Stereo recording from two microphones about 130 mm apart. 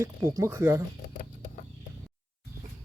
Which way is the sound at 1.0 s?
90° left.